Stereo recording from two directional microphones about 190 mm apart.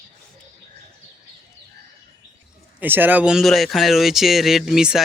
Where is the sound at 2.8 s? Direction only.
10° right (ahead or behind).